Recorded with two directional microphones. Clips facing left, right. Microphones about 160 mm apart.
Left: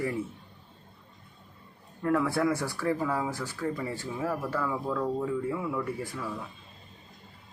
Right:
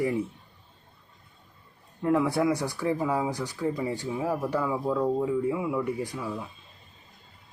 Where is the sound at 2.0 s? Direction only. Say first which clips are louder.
Right 2 dB; 15° right (ahead or behind).